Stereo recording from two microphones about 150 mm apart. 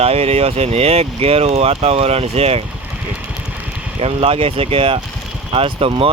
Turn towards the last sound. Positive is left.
turn(degrees=-40)  # may be behind; listen again after turning